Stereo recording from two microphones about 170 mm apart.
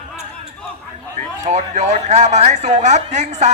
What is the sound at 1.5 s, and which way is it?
Speech, 40° right (ahead or behind).